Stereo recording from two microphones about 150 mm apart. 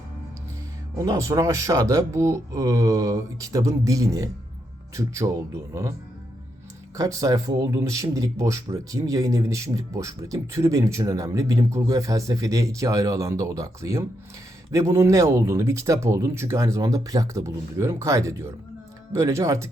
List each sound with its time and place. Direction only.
0.9 s speech: 20° right (ahead or behind)
6.9 s speech: 20° right (ahead or behind)